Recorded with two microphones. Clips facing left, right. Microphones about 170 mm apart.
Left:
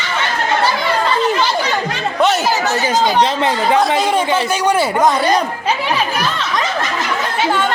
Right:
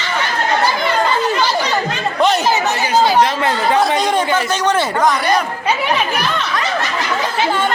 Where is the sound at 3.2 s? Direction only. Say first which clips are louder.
Even; 20° left (ahead or behind).